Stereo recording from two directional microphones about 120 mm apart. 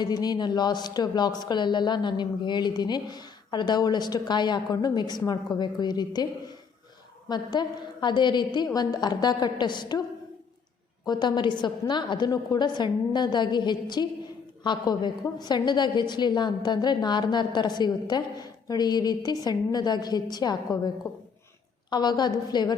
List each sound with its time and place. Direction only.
0.0 s a woman's voice: 35° left (ahead or behind)
7.3 s a woman's voice: 35° left (ahead or behind)
11.0 s a woman's voice: 35° left (ahead or behind)